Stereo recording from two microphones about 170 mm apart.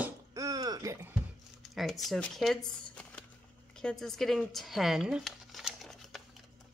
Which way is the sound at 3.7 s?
5° left (ahead or behind).